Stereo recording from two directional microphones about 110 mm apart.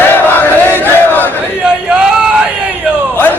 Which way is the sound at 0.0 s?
20° left (ahead or behind).